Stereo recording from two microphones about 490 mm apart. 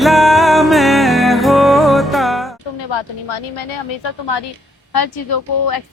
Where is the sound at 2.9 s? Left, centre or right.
Left.